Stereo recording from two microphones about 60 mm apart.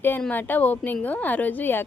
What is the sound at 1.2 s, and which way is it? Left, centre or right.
Speech, left.